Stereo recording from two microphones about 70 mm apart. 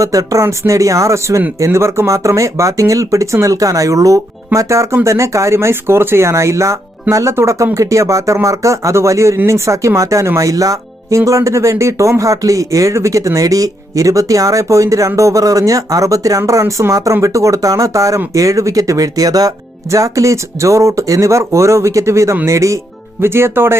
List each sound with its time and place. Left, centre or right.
0.0 s speech: right
23.2 s speech: right